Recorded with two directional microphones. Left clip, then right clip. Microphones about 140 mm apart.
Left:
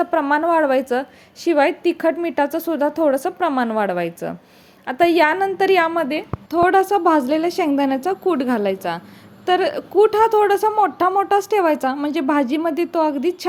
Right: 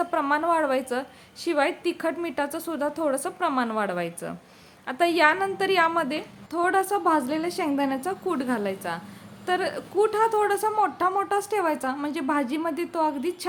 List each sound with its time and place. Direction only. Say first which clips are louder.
0.0 s a woman's voice: left 6 dB; 30° left (ahead or behind)
6.5 s a woman's voice: left 8 dB; 40° left (ahead or behind)